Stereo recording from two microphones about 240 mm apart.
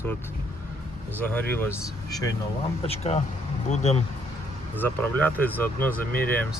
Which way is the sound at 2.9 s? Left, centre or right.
Left.